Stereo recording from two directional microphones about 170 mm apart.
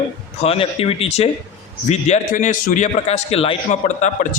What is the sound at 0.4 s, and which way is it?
A man's voice, 35° left (ahead or behind).